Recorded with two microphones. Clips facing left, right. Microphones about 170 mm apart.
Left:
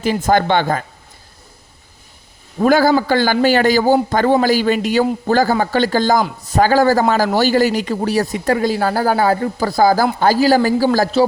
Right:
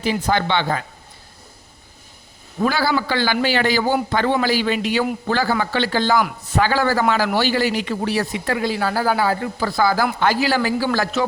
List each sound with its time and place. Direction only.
0.0 s speech: 45° left (ahead or behind)
2.6 s speech: 45° left (ahead or behind)